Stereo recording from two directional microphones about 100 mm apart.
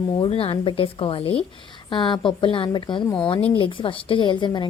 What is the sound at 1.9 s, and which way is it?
A woman's voice, 55° left (ahead or behind).